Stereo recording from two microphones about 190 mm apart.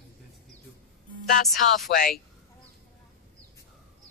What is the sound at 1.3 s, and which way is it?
Speech, 50° left (ahead or behind).